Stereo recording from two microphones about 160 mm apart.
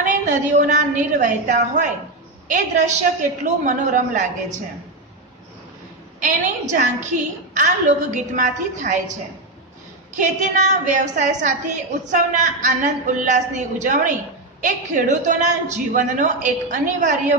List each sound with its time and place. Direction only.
0.0 s a woman's voice: 50° right (ahead or behind)
6.1 s a woman's voice: 50° right (ahead or behind)
10.1 s a woman's voice: 50° right (ahead or behind)